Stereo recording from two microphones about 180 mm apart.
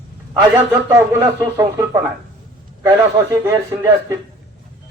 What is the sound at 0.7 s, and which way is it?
A man's voice, 15° right (ahead or behind).